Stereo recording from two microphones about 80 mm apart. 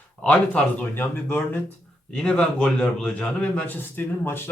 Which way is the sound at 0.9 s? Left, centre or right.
Left.